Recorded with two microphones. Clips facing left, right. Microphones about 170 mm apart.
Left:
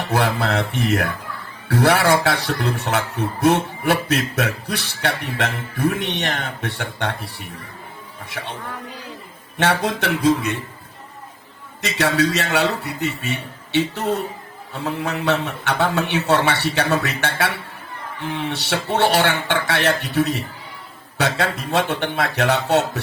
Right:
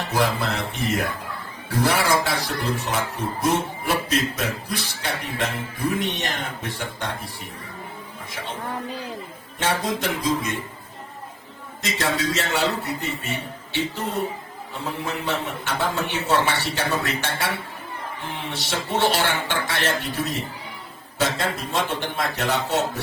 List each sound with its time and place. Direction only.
0.1 s mantra: 65° left (ahead or behind)
1.6 s speech: 70° left (ahead or behind)
9.6 s speech: 70° left (ahead or behind)
11.8 s speech: 70° left (ahead or behind)